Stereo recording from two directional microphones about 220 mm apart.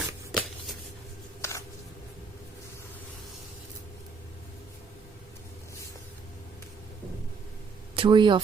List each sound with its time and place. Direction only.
0.3 s shuffling cards: centre (ahead or behind)
1.4 s a sound: 15° left (ahead or behind)
7.9 s speech: 20° right (ahead or behind)